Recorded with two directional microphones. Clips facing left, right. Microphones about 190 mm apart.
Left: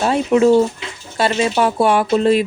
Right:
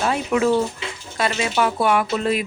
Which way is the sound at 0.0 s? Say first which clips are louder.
Left 6 dB; 30° left (ahead or behind).